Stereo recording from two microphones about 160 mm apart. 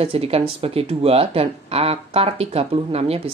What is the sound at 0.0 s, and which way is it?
Speech, 40° right (ahead or behind).